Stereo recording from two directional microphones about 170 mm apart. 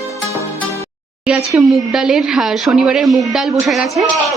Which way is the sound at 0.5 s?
15° left (ahead or behind).